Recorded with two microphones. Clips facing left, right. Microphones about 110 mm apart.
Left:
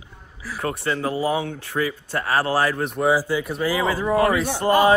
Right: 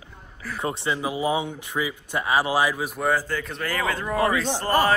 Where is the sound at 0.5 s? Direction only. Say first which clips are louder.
Left 2 dB; 20° right (ahead or behind); by 4.7 s 15° left (ahead or behind).